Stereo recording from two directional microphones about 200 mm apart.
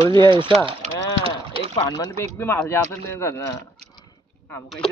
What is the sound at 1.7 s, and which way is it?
Speech, 25° left (ahead or behind).